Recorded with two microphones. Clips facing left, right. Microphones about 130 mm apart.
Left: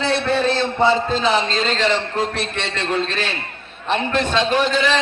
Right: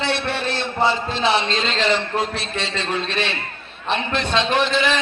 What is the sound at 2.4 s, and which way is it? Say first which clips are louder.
Speech: left 2 dB; 60° left (ahead or behind).